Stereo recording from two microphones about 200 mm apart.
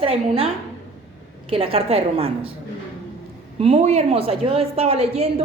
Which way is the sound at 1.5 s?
30° right (ahead or behind).